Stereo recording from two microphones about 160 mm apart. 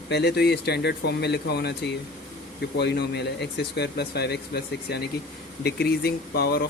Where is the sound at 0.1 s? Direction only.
90° left.